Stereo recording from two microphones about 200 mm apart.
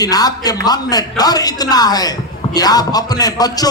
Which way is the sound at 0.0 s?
20° left (ahead or behind).